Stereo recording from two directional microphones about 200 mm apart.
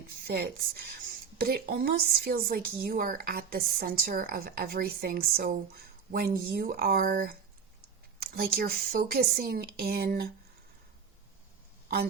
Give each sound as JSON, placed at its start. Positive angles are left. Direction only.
{"t": 0.3, "sound": "a woman's voice", "side_deg": -50}